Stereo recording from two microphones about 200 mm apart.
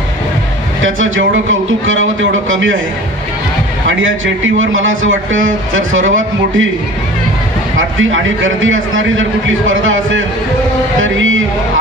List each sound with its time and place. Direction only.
0.8 s a man's voice: 75° right (ahead or behind)
3.8 s a man's voice: 75° right (ahead or behind)
7.7 s a man's voice: 75° right (ahead or behind)